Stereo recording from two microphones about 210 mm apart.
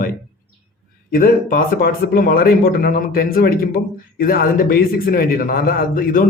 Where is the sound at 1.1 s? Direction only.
45° left (ahead or behind).